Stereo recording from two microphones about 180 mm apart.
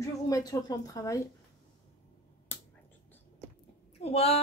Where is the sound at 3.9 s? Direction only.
35° left (ahead or behind).